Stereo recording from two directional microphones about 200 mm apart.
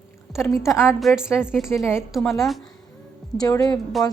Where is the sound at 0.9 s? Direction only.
Centre (ahead or behind).